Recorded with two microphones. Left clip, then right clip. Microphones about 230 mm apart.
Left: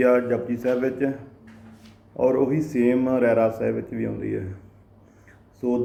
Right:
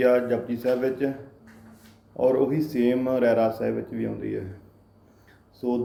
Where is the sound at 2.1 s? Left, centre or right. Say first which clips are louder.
Left 1 dB; centre.